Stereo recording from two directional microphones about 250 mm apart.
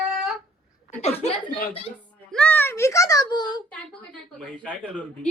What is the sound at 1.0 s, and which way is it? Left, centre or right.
Speech, left.